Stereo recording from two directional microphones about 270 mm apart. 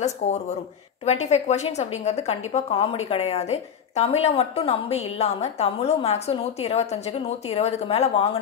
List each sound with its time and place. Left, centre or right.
1.0 s a woman's voice: left